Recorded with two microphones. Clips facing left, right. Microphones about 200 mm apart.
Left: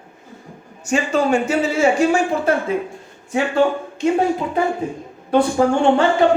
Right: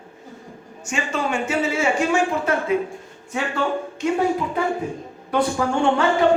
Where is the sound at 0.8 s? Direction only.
35° left (ahead or behind).